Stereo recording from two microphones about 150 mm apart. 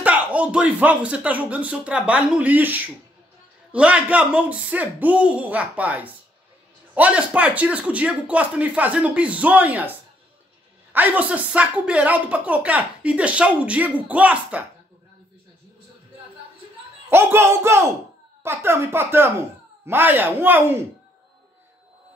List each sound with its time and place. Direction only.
0.0 s speech: 10° right (ahead or behind)
17.1 s speech: 15° right (ahead or behind)